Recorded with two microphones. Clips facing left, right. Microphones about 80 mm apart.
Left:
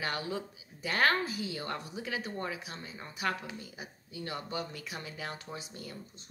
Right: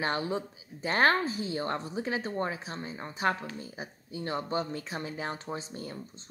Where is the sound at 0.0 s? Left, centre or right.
Right.